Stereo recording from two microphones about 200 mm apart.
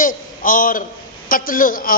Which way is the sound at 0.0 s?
45° left (ahead or behind).